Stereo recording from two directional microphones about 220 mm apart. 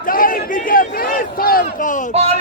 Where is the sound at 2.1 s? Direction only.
30° right (ahead or behind).